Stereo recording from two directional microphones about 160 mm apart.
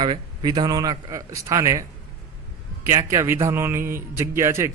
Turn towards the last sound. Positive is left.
turn(degrees=-15)  # may be behind; listen again after turning